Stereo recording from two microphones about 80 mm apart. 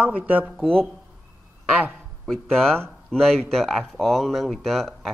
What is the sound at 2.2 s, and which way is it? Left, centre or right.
Speech, centre.